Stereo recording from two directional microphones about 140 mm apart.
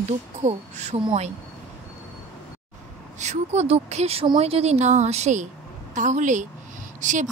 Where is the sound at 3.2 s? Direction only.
55° right (ahead or behind).